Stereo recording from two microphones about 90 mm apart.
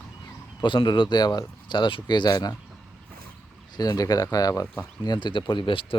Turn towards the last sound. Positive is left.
turn(degrees=70)  # may be behind; listen again after turning